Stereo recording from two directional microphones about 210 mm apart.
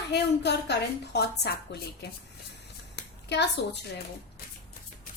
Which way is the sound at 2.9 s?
55° left (ahead or behind).